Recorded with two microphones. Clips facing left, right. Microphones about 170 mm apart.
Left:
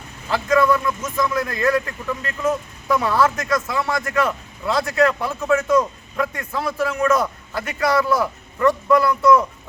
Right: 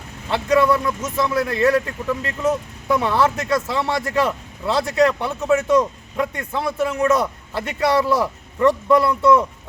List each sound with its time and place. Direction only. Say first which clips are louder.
0.3 s speech: right 1 dB; 25° right (ahead or behind)